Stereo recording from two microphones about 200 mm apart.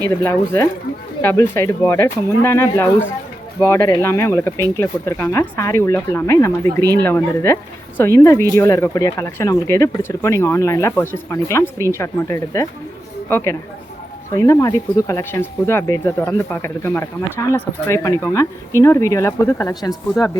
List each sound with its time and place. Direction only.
0.3 s speech: 15° left (ahead or behind)